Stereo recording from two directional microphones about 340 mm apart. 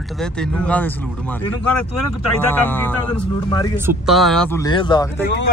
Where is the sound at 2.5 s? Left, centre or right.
Centre.